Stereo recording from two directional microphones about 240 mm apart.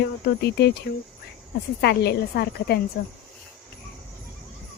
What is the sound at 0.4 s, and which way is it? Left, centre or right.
Speech, left.